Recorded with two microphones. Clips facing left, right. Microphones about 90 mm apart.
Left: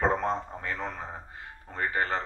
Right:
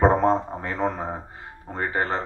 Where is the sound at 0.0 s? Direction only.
40° right (ahead or behind).